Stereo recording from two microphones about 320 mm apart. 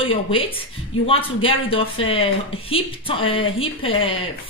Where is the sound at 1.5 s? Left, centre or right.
Centre.